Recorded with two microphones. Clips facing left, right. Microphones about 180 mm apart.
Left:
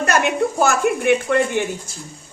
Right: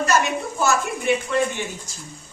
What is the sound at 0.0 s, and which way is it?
Speech, 60° left (ahead or behind).